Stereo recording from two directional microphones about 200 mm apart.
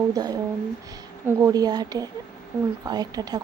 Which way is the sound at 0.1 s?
20° right (ahead or behind).